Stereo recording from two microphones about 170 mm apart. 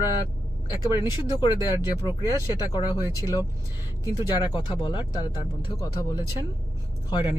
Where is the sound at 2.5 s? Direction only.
20° left (ahead or behind).